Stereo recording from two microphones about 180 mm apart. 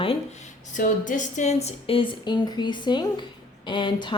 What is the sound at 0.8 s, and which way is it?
A woman's voice, 45° left (ahead or behind).